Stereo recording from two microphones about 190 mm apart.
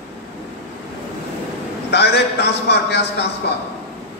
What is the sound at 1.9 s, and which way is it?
A man's voice, 60° left (ahead or behind).